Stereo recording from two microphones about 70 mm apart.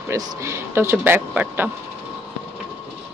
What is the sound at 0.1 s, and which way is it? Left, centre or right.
Speech, right.